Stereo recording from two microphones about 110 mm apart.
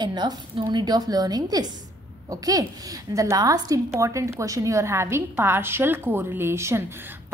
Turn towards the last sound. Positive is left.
turn(degrees=-25)  # may be behind; listen again after turning